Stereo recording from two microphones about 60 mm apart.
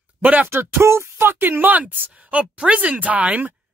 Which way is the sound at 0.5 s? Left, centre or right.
Right.